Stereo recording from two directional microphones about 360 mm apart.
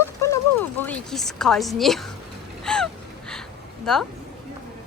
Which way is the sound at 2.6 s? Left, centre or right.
Centre.